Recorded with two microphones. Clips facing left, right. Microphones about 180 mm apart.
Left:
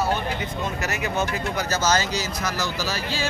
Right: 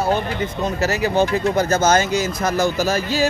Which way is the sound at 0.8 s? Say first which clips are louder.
Right 10 dB; 35° right (ahead or behind).